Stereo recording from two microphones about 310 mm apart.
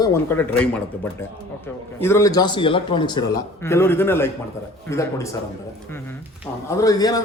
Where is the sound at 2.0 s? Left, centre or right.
Centre.